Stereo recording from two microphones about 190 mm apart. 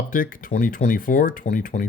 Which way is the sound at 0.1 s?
45° left (ahead or behind).